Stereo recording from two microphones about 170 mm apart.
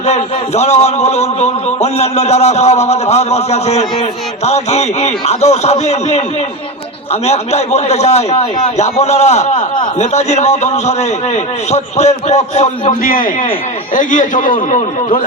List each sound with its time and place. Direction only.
0.0 s a man's voice: 40° left (ahead or behind)
9.6 s speech: 25° left (ahead or behind)
10.0 s a man's voice: 40° left (ahead or behind)